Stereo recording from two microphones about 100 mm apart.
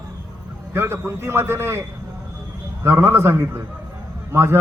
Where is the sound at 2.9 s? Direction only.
25° right (ahead or behind).